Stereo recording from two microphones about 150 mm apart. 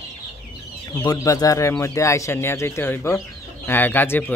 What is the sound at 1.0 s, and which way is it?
Speech, 25° left (ahead or behind).